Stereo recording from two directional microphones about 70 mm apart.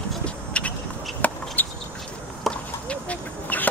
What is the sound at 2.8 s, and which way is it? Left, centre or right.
Chicken, centre.